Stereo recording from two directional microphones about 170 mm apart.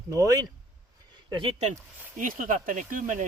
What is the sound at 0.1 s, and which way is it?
Speech, 20° right (ahead or behind).